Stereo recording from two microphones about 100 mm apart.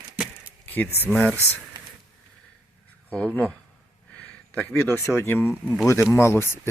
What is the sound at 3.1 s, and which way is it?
Speech, 10° left (ahead or behind).